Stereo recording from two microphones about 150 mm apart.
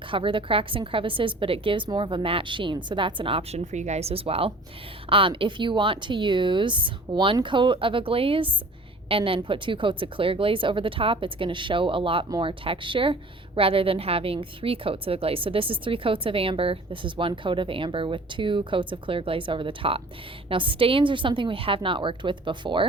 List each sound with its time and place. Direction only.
0.1 s a woman's voice: 35° right (ahead or behind)
3.6 s a woman's voice: 50° right (ahead or behind); by 22.9 s 35° right (ahead or behind)